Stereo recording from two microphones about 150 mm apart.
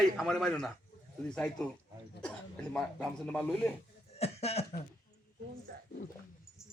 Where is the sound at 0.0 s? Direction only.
5° left (ahead or behind).